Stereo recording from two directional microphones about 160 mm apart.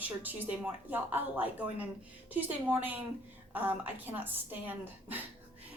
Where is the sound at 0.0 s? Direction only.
10° right (ahead or behind).